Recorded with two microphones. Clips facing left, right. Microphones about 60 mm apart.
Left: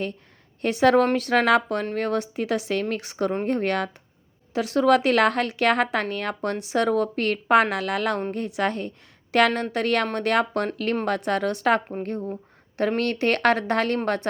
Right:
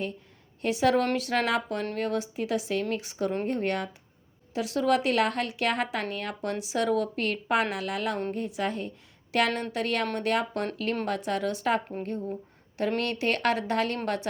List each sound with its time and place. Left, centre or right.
0.6 s a woman's voice: left
12.2 s a sound: left
13.0 s speech: left